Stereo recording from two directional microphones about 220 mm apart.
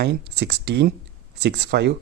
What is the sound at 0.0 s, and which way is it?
Speech, 45° right (ahead or behind).